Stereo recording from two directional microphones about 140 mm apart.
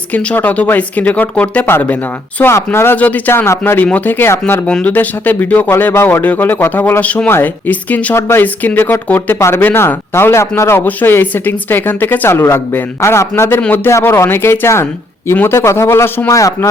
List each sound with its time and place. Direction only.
0.1 s speech: 10° left (ahead or behind)